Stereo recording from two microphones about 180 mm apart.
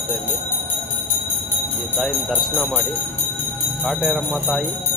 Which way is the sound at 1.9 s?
Centre (ahead or behind).